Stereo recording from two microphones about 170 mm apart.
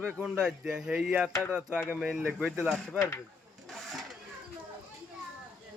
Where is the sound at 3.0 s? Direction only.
15° left (ahead or behind).